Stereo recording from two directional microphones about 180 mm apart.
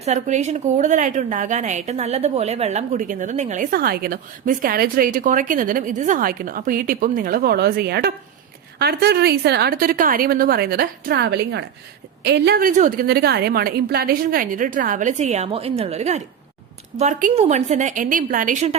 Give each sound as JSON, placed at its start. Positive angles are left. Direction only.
{"t": 0.0, "sound": "a woman's voice", "side_deg": -40}